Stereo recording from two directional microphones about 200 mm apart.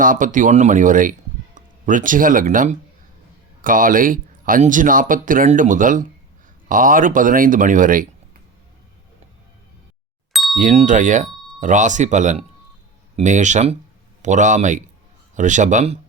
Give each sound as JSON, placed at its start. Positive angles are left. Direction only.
{"t": 0.0, "sound": "speech", "side_deg": -40}
{"t": 10.3, "sound": "ding", "side_deg": 0}
{"t": 10.6, "sound": "speech", "side_deg": -40}